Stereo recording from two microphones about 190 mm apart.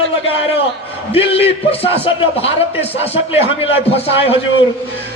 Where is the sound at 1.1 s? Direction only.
30° left (ahead or behind).